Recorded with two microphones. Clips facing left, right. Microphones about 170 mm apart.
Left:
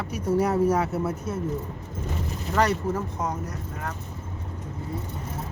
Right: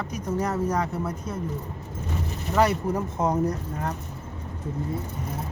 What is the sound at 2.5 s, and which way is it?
Speech, 10° right (ahead or behind).